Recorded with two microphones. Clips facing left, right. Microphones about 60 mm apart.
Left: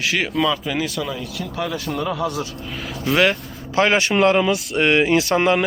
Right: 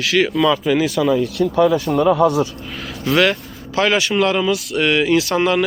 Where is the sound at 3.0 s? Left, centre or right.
Centre.